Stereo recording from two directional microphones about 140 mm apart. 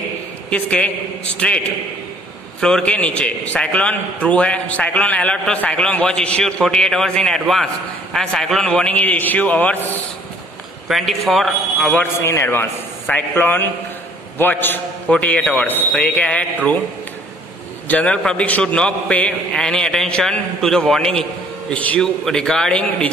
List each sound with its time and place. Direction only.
0.5 s a man's voice: 10° left (ahead or behind)
2.6 s a man's voice: 5° left (ahead or behind)
10.9 s a man's voice: centre (ahead or behind)
11.9 s a man's voice: 15° left (ahead or behind)
17.8 s a man's voice: 10° left (ahead or behind)